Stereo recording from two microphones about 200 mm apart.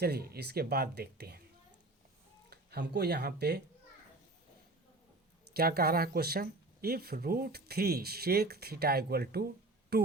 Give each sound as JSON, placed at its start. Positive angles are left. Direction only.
{"t": 0.0, "sound": "speech", "side_deg": -50}
{"t": 2.5, "sound": "speech", "side_deg": -55}
{"t": 5.5, "sound": "speech", "side_deg": -50}